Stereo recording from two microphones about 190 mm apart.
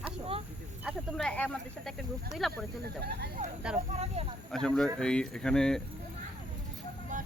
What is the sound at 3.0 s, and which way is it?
Speech, 60° right (ahead or behind).